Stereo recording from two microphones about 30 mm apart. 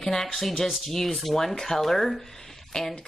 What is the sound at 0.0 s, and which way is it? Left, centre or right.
Speech, centre.